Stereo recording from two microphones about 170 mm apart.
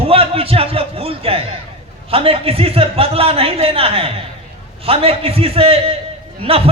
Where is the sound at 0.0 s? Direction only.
35° right (ahead or behind).